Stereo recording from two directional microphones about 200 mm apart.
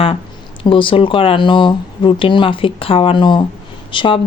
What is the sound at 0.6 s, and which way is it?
Speech, 25° left (ahead or behind).